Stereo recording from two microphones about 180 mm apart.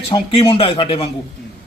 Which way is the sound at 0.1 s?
30° left (ahead or behind).